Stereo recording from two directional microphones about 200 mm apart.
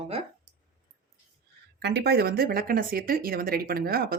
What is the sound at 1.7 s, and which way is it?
Speech, 55° right (ahead or behind).